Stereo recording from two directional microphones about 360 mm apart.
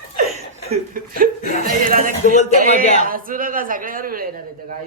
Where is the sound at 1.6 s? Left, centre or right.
Right.